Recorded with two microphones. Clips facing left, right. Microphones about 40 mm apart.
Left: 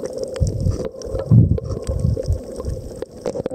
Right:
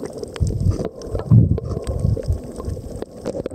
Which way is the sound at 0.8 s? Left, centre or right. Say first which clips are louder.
Left 1 dB; centre.